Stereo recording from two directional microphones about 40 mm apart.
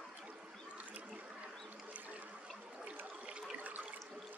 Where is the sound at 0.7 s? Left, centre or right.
Right.